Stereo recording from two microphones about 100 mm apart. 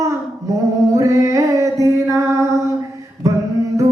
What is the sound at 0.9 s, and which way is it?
Mantra, 30° right (ahead or behind).